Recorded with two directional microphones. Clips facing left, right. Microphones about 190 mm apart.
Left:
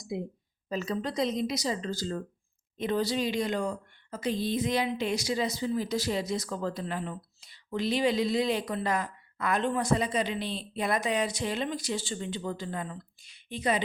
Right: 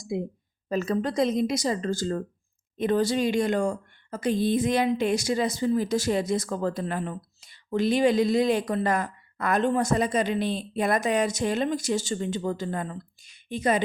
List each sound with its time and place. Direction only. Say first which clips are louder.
0.1 s speech: right 5 dB; 50° right (ahead or behind)